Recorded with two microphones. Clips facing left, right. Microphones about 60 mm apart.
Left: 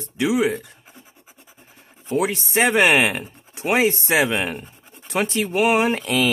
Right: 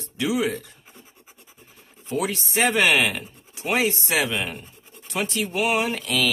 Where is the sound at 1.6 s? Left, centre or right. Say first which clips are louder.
Left 5 dB; left.